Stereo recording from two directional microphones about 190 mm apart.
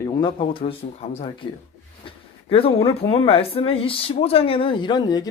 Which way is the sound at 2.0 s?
30° left (ahead or behind).